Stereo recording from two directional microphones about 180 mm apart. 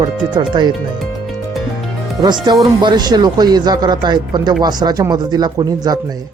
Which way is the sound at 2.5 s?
25° right (ahead or behind).